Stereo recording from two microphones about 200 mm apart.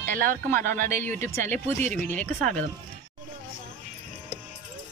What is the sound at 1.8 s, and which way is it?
Speech, 40° right (ahead or behind).